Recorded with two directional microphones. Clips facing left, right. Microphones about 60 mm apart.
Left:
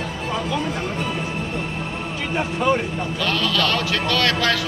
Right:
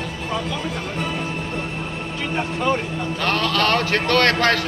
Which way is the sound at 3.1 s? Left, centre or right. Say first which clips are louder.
Right 2 dB; right.